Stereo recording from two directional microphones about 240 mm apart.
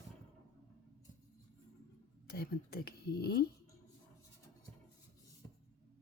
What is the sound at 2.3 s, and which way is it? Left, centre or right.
Speech, left.